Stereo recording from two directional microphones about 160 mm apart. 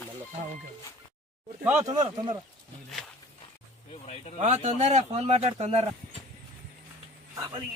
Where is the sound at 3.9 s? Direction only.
40° left (ahead or behind).